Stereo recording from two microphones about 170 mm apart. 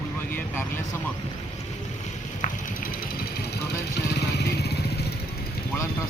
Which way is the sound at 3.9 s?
75° left (ahead or behind).